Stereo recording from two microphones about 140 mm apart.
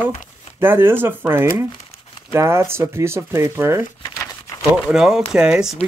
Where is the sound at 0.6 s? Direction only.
15° right (ahead or behind).